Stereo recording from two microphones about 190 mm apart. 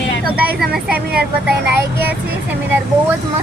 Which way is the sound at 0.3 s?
5° right (ahead or behind).